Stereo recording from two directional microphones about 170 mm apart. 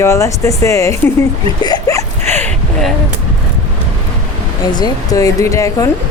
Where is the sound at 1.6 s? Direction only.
20° left (ahead or behind).